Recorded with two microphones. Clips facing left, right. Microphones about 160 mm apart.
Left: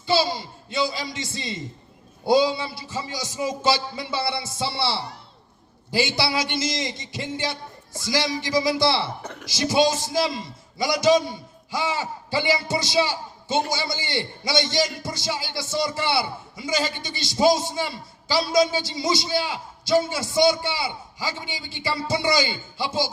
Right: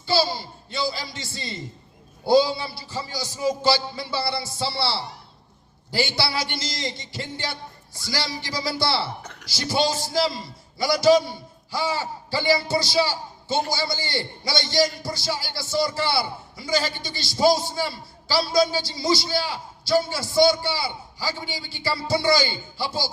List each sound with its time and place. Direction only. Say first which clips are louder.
0.1 s a man's voice: left 1 dB; 20° left (ahead or behind)